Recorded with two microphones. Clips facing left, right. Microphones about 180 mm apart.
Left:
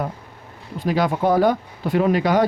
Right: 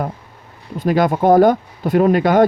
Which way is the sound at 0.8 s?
50° right (ahead or behind).